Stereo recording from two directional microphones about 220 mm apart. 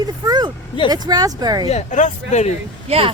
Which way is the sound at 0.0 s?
20° right (ahead or behind).